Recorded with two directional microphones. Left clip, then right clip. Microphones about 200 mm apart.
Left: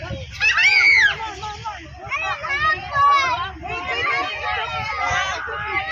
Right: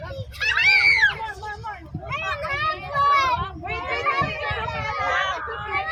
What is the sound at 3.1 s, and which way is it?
Children playing, 35° right (ahead or behind).